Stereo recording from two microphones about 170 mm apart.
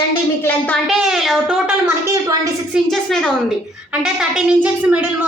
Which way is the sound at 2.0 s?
20° right (ahead or behind).